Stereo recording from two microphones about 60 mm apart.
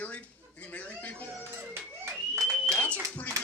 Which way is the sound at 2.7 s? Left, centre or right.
Left.